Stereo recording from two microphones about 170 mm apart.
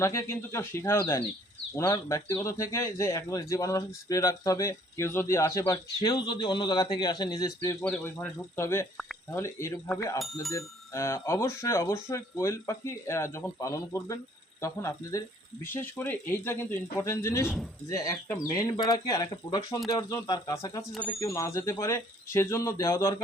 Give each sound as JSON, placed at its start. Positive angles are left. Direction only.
{"t": 0.0, "sound": "speech", "side_deg": 15}
{"t": 7.9, "sound": "speech", "side_deg": 5}
{"t": 17.4, "sound": "speech", "side_deg": 0}
{"t": 17.9, "sound": "speech", "side_deg": 20}